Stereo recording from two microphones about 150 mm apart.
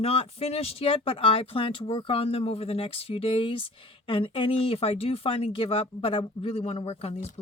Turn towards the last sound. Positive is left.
turn(degrees=45)  # may be behind; listen again after turning